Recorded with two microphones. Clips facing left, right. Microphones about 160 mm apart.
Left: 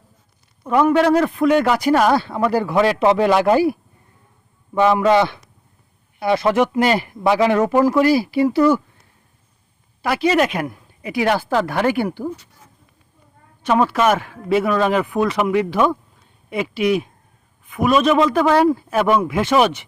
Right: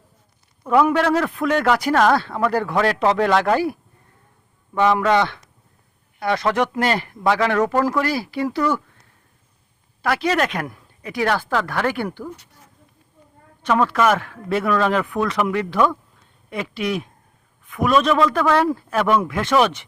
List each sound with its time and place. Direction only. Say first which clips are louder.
0.6 s a man's voice: left 2 dB; centre (ahead or behind)
10.0 s speech: left 3 dB; 5° left (ahead or behind)
13.7 s speech: left 2 dB; 15° left (ahead or behind)
14.2 s a man's voice: left 4 dB; 5° left (ahead or behind)